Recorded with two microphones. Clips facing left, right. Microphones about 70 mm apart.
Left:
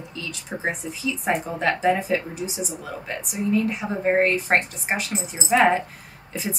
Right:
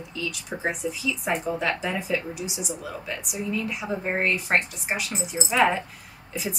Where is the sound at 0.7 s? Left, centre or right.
Left.